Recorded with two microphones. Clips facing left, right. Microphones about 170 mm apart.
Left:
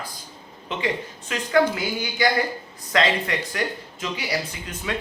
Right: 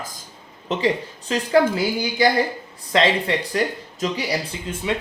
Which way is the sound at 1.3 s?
30° right (ahead or behind).